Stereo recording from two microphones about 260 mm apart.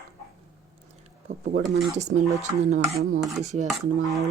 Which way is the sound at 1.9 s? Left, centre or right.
Right.